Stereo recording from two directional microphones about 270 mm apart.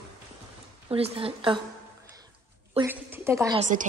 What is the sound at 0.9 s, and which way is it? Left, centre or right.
Speech, right.